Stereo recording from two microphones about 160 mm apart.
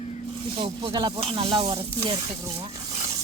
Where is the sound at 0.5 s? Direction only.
30° right (ahead or behind).